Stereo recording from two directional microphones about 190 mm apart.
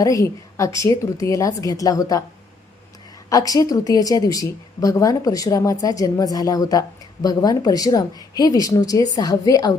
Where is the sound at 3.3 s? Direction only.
20° left (ahead or behind).